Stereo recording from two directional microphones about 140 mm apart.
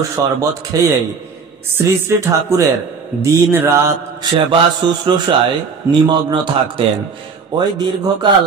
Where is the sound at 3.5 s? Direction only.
20° right (ahead or behind).